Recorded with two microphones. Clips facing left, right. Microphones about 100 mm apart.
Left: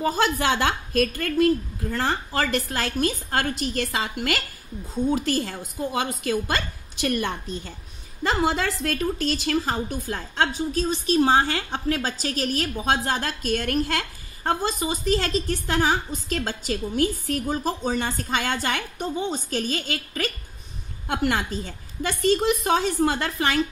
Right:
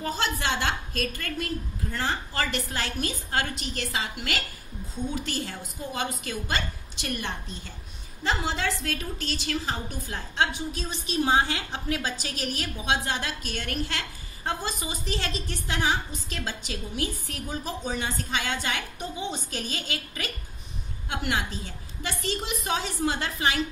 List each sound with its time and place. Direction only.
0.0 s a woman's voice: 50° left (ahead or behind)